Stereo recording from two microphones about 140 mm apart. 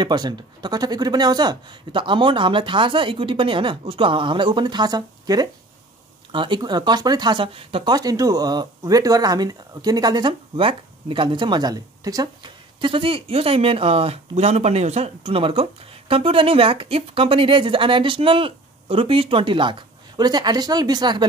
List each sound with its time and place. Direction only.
0.0 s speech: 30° right (ahead or behind)
7.9 s speech: 25° right (ahead or behind)